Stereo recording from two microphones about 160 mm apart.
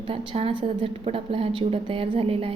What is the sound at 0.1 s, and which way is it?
A woman's voice, 35° right (ahead or behind).